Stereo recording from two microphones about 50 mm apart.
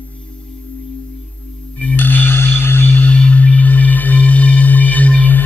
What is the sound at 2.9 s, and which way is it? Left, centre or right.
Music, left.